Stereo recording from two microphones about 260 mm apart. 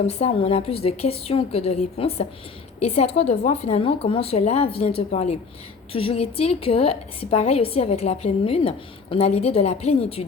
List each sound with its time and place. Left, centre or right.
0.1 s a woman's voice: left